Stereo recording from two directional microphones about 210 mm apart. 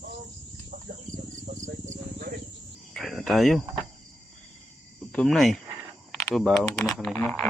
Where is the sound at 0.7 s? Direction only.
40° right (ahead or behind).